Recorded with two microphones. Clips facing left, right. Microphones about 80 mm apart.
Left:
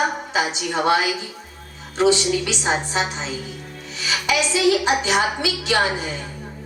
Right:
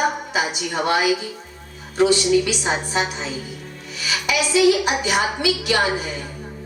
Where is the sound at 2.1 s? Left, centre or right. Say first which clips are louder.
Right 3 dB; left.